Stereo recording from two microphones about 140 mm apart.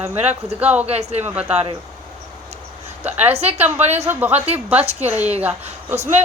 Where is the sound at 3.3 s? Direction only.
45° right (ahead or behind).